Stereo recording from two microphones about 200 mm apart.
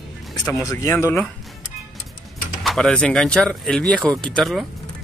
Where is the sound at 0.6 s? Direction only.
15° left (ahead or behind).